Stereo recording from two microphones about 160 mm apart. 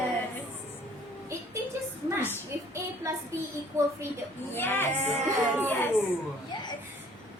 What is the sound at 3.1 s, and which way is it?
Child singing, 20° right (ahead or behind).